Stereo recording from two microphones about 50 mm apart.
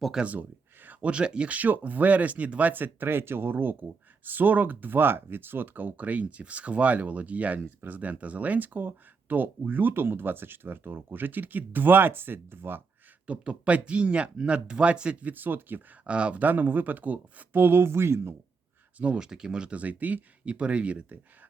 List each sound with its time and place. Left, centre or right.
0.2 s speech: centre
1.5 s speech: right
13.2 s speech: right
16.0 s speech: right
18.9 s speech: right
19.2 s speech: centre
19.8 s speech: right
20.4 s speech: right